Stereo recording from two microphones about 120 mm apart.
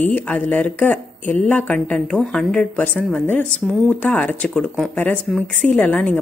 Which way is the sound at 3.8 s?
10° left (ahead or behind).